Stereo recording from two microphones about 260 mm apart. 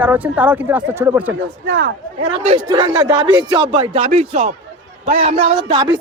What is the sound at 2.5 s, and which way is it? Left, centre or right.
Speech, centre.